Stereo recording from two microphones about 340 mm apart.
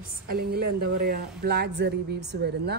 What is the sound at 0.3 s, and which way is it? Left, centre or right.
Speech, right.